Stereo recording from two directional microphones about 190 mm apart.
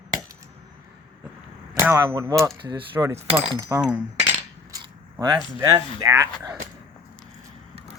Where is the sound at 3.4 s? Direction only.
15° right (ahead or behind).